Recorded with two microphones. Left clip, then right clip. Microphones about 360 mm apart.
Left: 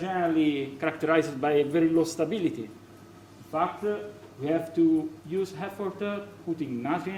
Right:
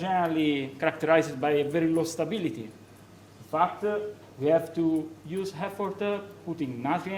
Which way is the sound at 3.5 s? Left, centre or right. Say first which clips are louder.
Right 2 dB; right.